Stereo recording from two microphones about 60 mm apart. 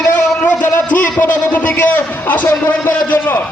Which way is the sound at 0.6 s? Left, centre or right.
Left.